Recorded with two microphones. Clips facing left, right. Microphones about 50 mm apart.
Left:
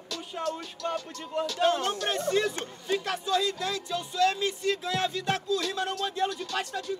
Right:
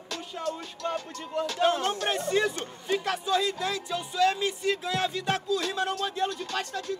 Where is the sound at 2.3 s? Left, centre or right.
Centre.